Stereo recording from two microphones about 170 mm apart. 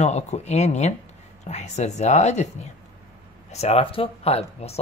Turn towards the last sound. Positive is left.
turn(degrees=35)  # may be behind; listen again after turning